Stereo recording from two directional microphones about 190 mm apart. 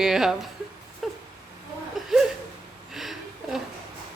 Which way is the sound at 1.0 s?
Centre (ahead or behind).